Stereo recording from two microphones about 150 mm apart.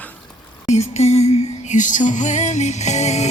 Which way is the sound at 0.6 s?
45° left (ahead or behind).